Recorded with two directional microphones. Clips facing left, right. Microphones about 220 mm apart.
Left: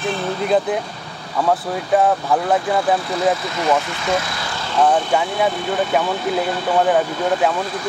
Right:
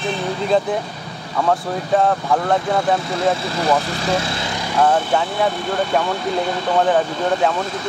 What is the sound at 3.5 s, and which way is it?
Speech, 35° right (ahead or behind).